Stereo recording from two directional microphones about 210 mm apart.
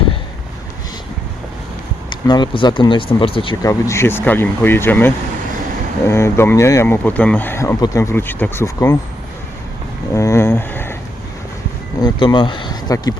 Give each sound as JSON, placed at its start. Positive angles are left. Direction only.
{"t": 2.0, "sound": "speech", "side_deg": 20}
{"t": 10.2, "sound": "speech", "side_deg": 15}
{"t": 12.0, "sound": "speech", "side_deg": 20}